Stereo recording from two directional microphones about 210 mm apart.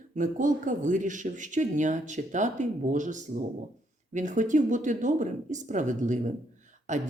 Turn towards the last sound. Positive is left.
turn(degrees=-35)  # may be behind; listen again after turning